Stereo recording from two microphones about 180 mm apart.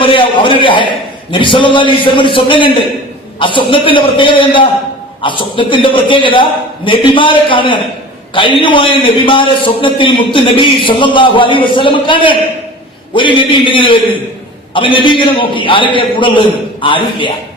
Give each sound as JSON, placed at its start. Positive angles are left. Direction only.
{"t": 0.0, "sound": "a man's voice", "side_deg": 30}